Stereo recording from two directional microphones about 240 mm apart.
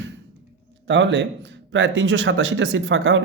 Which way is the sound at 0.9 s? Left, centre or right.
Right.